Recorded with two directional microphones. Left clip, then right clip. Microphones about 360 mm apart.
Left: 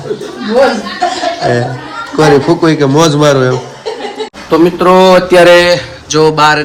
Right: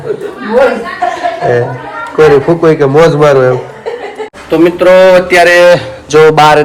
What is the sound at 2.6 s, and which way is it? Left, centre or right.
Speech, centre.